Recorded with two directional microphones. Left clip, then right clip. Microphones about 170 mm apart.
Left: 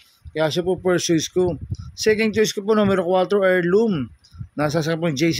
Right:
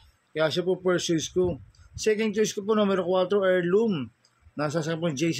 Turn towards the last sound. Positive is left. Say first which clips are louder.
# left 7 dB
turn(degrees=45)  # may be behind; listen again after turning